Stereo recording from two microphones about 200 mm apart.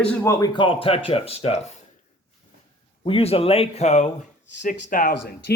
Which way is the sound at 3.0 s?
30° left (ahead or behind).